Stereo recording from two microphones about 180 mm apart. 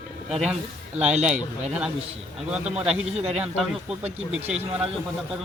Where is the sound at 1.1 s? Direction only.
40° right (ahead or behind).